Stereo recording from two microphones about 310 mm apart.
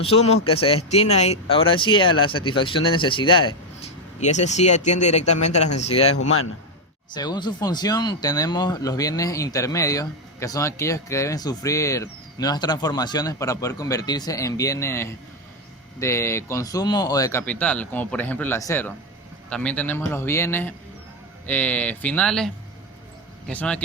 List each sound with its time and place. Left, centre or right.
0.0 s speech: centre
7.1 s speech: centre